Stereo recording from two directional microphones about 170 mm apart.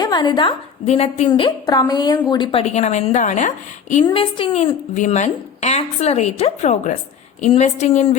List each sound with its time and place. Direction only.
0.0 s a woman's voice: 25° left (ahead or behind)
1.3 s a woman's voice: 25° left (ahead or behind); by 4.0 s 45° left (ahead or behind)
4.0 s a woman's voice: 30° left (ahead or behind)